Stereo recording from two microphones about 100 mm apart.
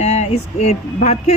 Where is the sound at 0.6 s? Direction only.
90° left.